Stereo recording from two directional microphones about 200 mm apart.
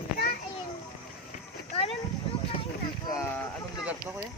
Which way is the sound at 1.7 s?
30° left (ahead or behind).